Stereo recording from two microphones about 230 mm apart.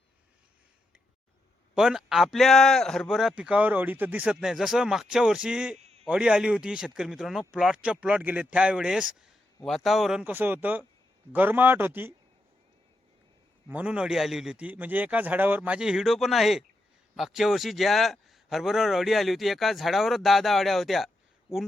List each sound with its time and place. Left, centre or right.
1.7 s a man's voice: centre
5.8 s a sound: right
6.1 s a man's voice: centre
13.7 s a man's voice: centre